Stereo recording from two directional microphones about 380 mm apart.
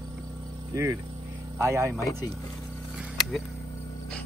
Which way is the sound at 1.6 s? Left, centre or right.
Centre.